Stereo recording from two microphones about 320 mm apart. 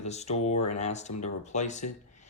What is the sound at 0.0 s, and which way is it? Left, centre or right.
Speech, left.